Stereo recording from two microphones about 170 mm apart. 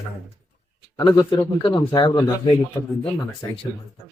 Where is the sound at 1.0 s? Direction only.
25° left (ahead or behind).